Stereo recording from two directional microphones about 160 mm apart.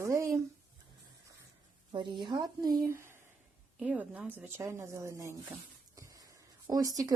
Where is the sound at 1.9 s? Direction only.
30° right (ahead or behind).